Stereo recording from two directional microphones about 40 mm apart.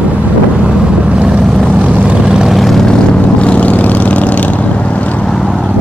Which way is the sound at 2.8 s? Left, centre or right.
Left.